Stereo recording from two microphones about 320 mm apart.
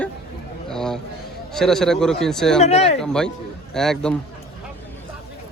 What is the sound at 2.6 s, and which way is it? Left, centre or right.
Speech, centre.